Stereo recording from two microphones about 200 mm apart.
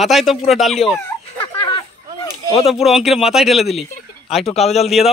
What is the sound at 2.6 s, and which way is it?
Speech, centre (ahead or behind).